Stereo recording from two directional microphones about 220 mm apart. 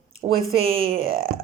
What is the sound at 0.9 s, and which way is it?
Speech, 60° right (ahead or behind).